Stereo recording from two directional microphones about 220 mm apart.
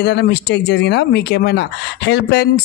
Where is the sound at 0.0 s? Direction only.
50° left (ahead or behind).